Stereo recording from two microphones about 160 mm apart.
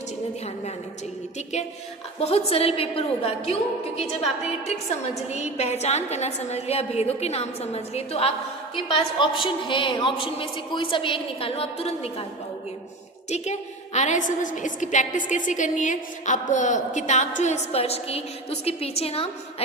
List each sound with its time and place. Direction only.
2.1 s a woman's voice: 40° left (ahead or behind)
13.3 s a woman's voice: 45° left (ahead or behind)